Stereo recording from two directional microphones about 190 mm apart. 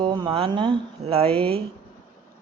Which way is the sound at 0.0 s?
25° right (ahead or behind).